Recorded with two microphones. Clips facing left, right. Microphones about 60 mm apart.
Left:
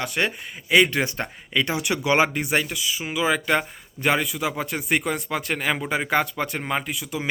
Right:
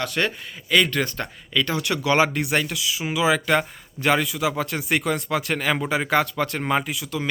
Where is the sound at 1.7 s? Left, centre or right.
Centre.